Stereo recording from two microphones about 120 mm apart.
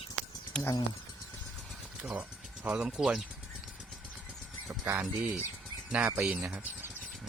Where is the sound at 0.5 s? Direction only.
5° left (ahead or behind).